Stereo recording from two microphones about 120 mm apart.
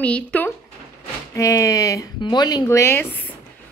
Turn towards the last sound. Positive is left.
turn(degrees=20)  # may be behind; listen again after turning